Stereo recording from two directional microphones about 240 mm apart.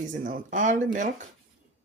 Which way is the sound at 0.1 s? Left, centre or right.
Right.